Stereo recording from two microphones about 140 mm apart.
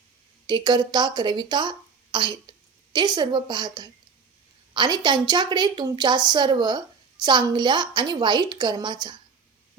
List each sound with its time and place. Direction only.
0.4 s a woman's voice: 30° right (ahead or behind)